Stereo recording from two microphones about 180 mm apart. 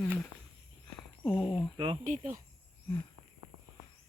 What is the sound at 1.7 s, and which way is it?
Speech, 30° right (ahead or behind).